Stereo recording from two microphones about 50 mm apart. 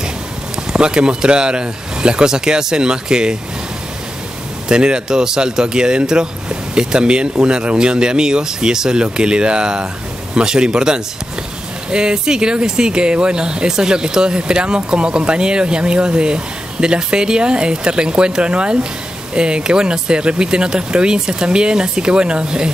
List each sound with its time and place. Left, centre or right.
0.7 s speech: centre
4.6 s speech: centre